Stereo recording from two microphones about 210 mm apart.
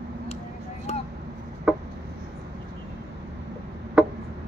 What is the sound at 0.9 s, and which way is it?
Vehicle, 30° left (ahead or behind).